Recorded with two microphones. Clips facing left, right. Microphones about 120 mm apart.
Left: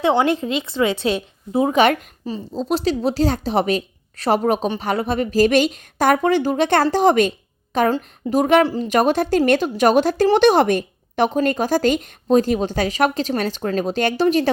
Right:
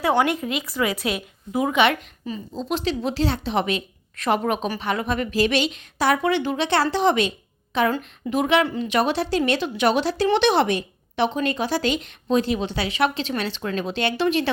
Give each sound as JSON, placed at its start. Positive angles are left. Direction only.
{"t": 0.0, "sound": "a woman's voice", "side_deg": 20}